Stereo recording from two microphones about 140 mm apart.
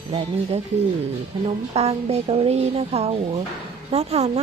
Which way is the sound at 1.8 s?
45° right (ahead or behind).